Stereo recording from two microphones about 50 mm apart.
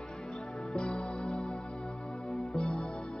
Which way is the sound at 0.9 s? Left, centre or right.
Centre.